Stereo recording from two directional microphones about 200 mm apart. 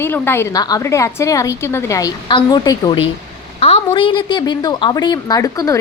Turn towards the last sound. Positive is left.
turn(degrees=15)  # may be behind; listen again after turning